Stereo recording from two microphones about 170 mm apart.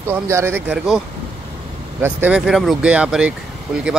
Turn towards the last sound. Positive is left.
turn(degrees=-5)  # may be behind; listen again after turning